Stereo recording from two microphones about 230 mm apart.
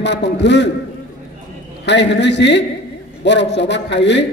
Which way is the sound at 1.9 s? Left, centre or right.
Left.